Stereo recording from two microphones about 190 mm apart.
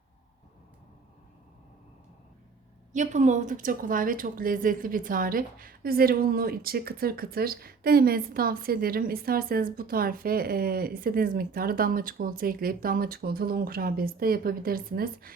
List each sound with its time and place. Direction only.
2.9 s speech: 40° right (ahead or behind)